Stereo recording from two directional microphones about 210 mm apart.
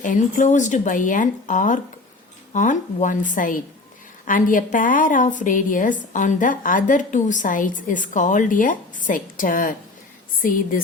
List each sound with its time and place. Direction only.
0.0 s a woman's voice: 40° left (ahead or behind)